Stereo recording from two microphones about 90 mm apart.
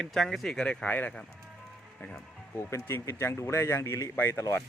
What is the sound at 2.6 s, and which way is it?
Speech, 30° left (ahead or behind).